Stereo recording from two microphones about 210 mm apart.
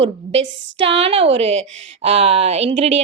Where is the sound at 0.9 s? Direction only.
25° right (ahead or behind).